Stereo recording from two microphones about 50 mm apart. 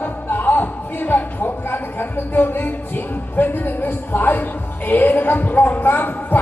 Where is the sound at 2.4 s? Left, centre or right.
Left.